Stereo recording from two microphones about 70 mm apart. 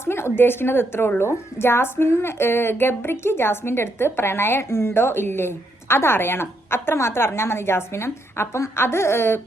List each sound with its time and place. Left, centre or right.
0.0 s a woman's voice: left